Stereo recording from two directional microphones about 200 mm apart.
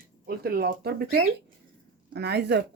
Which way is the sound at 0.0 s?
50° right (ahead or behind).